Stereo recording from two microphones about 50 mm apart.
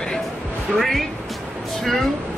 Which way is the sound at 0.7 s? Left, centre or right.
Centre.